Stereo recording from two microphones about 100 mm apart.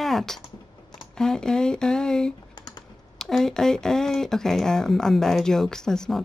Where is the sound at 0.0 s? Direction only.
5° left (ahead or behind).